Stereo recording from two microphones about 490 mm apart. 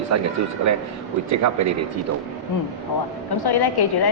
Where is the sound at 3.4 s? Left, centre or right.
Left.